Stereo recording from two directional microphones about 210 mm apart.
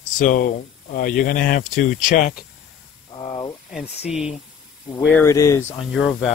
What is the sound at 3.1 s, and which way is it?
Speech, 25° left (ahead or behind).